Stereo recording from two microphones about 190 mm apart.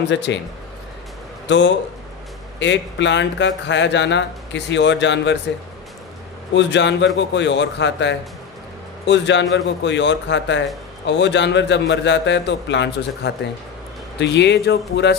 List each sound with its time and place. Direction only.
0.1 s speech: 70° left (ahead or behind)
1.5 s speech: 70° left (ahead or behind)
6.5 s speech: 70° left (ahead or behind)